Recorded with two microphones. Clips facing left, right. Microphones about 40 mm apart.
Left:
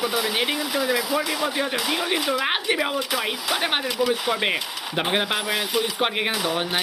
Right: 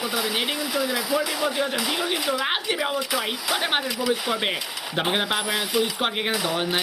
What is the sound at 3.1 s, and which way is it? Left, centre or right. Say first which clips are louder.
Speech: left 1 dB; left.